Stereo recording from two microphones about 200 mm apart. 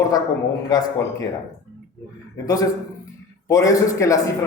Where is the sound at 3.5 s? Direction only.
15° left (ahead or behind).